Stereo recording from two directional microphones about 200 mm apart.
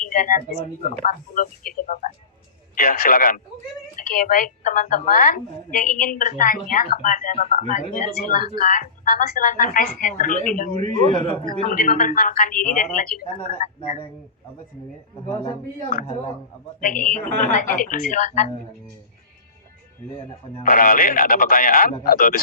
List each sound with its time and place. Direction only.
0.0 s a woman's voice: 40° left (ahead or behind)
10.9 s a man's voice: 25° left (ahead or behind)
11.7 s a woman's voice: 45° left (ahead or behind)
15.3 s a man's voice: 20° left (ahead or behind)
16.8 s a woman's voice: 40° left (ahead or behind)
20.7 s a woman's voice: 45° left (ahead or behind)